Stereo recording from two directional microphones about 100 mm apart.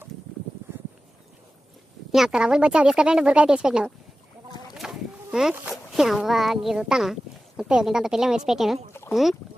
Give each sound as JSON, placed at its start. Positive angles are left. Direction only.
{"t": 2.1, "sound": "speech", "side_deg": -5}
{"t": 4.7, "sound": "a sound", "side_deg": -5}
{"t": 5.7, "sound": "speech", "side_deg": 0}
{"t": 8.9, "sound": "pour", "side_deg": 25}